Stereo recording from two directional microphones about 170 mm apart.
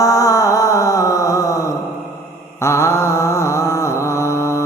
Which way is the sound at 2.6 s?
15° left (ahead or behind).